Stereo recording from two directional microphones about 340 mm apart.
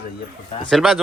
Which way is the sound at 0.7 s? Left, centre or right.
Centre.